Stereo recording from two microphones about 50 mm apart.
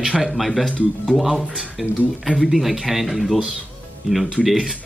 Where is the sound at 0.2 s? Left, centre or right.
Centre.